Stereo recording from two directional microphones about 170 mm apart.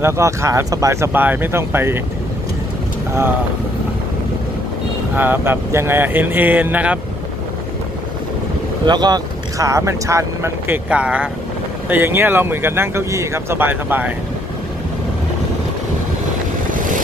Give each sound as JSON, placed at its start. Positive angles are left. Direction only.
{"t": 0.0, "sound": "speech", "side_deg": -15}
{"t": 5.1, "sound": "speech", "side_deg": -10}
{"t": 8.8, "sound": "speech", "side_deg": -25}